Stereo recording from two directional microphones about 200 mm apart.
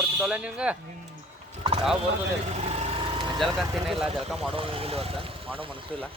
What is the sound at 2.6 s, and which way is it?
Vehicle, 30° right (ahead or behind).